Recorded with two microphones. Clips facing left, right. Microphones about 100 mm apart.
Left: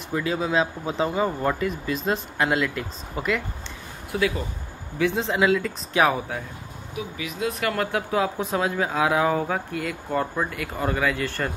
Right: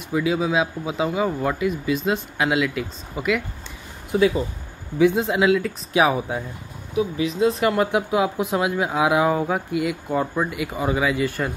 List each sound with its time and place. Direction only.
0.1 s speech: 10° right (ahead or behind)
4.1 s speech: 25° right (ahead or behind)
5.4 s speech: 5° right (ahead or behind)
7.0 s speech: 30° right (ahead or behind); by 11.5 s 10° right (ahead or behind)